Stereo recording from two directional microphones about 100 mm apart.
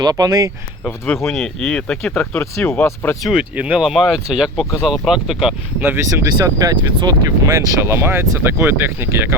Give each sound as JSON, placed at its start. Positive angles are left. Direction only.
{"t": 0.0, "sound": "speech", "side_deg": -40}
{"t": 1.0, "sound": "speech", "side_deg": 10}
{"t": 3.5, "sound": "speech", "side_deg": -15}
{"t": 3.8, "sound": "speech", "side_deg": 0}
{"t": 5.8, "sound": "speech", "side_deg": -20}
{"t": 6.4, "sound": "speech", "side_deg": -40}
{"t": 7.4, "sound": "speech", "side_deg": -30}